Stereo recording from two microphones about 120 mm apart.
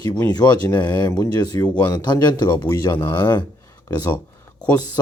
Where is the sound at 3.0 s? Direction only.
20° left (ahead or behind).